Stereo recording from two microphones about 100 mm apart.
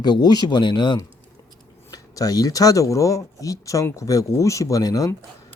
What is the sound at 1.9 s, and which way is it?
Speech, 40° left (ahead or behind).